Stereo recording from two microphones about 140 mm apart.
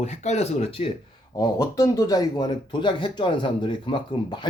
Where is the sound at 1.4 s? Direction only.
25° left (ahead or behind).